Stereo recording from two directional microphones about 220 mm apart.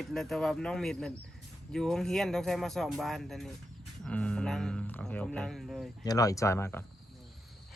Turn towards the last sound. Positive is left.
turn(degrees=10)  # may be behind; listen again after turning